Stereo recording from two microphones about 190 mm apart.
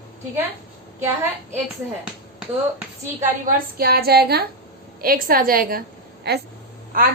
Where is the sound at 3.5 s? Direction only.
55° right (ahead or behind).